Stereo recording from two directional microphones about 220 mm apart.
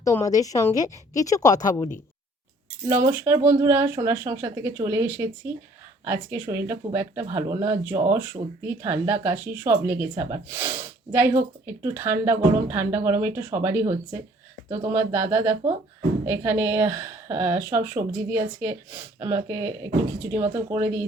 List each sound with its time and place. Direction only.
0.0 s a woman's voice: 15° left (ahead or behind)
2.8 s speech: 15° right (ahead or behind)
14.9 s speech: 10° right (ahead or behind)